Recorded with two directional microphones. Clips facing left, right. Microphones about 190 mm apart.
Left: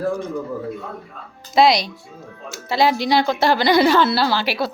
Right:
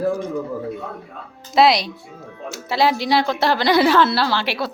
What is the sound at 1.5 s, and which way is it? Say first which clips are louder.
Speech: even; centre (ahead or behind).